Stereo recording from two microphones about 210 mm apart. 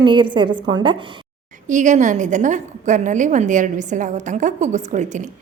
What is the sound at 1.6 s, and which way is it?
A woman's voice, 35° right (ahead or behind).